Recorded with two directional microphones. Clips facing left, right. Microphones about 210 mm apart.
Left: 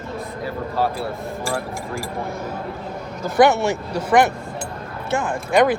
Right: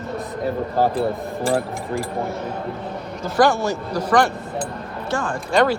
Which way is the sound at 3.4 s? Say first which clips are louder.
Left 2 dB; 25° left (ahead or behind).